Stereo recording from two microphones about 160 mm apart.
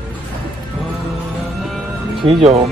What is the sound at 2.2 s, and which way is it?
Speech, 35° right (ahead or behind).